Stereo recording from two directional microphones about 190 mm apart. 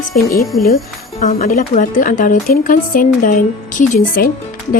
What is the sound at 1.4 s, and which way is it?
A woman's voice, 50° left (ahead or behind).